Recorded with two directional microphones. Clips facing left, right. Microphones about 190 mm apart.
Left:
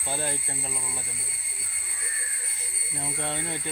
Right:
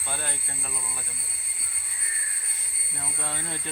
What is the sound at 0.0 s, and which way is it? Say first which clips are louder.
Speech: left 4 dB; 30° left (ahead or behind).